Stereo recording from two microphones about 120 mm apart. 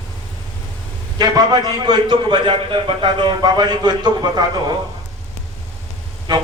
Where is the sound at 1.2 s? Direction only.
35° right (ahead or behind).